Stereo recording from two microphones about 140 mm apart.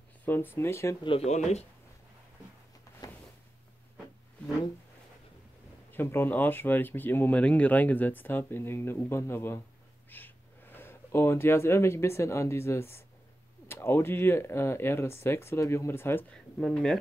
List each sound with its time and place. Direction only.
0.2 s speech: 15° left (ahead or behind)
1.0 s speech: 45° left (ahead or behind)
3.0 s a sound: 25° left (ahead or behind)
5.9 s speech: 15° left (ahead or behind)
16.5 s speech: 5° left (ahead or behind)